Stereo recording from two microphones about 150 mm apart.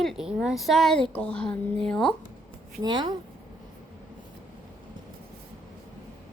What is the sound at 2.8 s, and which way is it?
Speech, 30° right (ahead or behind).